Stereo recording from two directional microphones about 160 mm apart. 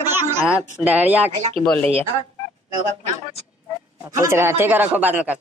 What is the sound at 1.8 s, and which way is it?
Speech, 40° right (ahead or behind).